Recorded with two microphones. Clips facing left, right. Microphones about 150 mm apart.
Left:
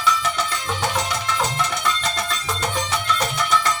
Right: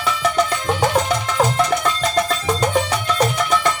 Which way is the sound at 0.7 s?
35° right (ahead or behind).